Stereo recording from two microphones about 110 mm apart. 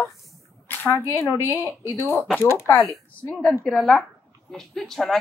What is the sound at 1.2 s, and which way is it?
A woman's voice, 25° left (ahead or behind).